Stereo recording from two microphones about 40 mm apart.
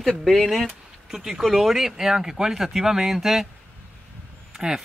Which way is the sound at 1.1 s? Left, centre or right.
Centre.